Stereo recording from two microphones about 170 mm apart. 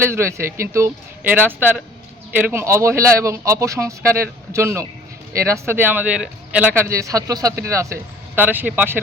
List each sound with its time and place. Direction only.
0.0 s a man's voice: 15° right (ahead or behind)